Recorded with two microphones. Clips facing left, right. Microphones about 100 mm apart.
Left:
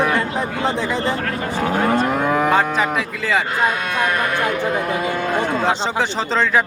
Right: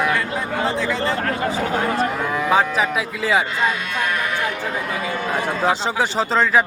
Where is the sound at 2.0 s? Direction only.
50° left (ahead or behind).